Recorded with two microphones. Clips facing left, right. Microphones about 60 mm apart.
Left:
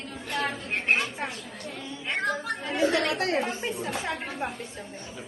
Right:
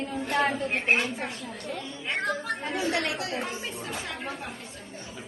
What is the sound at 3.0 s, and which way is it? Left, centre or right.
Speech, left.